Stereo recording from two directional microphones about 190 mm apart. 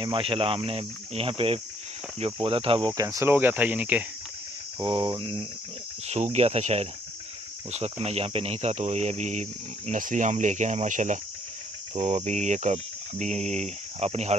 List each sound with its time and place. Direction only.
0.0 s speech: 25° right (ahead or behind); by 4.0 s 10° right (ahead or behind)
4.7 s speech: 25° right (ahead or behind)
11.9 s cricket: 35° right (ahead or behind)
12.3 s speech: 40° right (ahead or behind)